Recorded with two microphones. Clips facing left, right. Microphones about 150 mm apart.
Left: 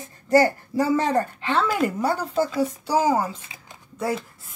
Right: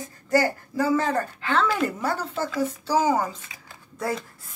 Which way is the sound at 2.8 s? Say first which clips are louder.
Even; 10° left (ahead or behind).